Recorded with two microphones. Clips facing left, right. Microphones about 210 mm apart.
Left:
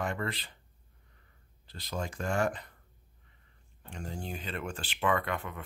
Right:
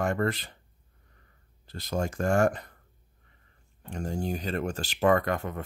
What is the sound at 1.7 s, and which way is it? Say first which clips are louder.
Speech: right 7 dB; 45° right (ahead or behind).